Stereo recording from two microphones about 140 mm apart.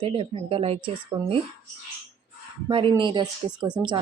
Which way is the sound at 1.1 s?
30° right (ahead or behind).